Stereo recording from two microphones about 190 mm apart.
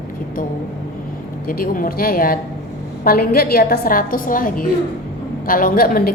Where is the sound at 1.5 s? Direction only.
50° left (ahead or behind).